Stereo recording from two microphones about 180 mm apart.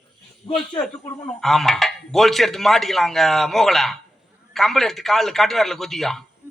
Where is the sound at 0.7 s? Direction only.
5° left (ahead or behind).